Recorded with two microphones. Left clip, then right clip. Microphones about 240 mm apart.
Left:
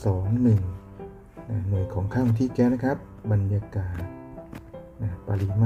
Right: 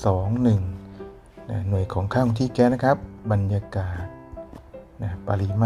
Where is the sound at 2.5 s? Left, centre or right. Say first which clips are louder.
Right 7 dB; centre.